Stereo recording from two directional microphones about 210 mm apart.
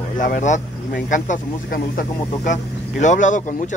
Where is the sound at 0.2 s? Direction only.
35° left (ahead or behind).